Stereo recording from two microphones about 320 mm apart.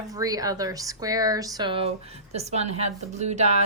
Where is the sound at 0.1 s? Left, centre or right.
Centre.